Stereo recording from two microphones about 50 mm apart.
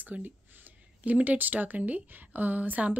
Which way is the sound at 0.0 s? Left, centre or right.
Right.